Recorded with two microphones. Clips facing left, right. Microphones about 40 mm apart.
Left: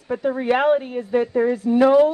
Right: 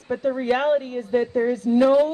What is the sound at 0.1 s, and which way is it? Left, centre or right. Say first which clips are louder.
Speech: left 2 dB; centre.